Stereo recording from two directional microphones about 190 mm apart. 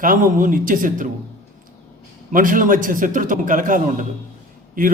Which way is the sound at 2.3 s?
45° right (ahead or behind).